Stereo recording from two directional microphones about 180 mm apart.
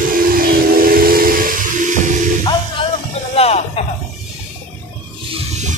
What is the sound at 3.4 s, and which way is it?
Music, 35° left (ahead or behind).